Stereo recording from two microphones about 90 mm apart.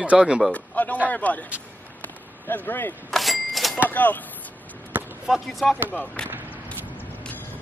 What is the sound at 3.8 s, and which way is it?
Speech, 20° left (ahead or behind).